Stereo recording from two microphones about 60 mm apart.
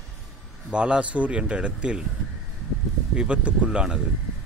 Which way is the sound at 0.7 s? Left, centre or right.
Centre.